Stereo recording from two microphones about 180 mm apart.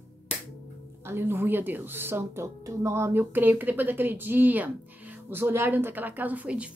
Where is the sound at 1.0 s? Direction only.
15° right (ahead or behind).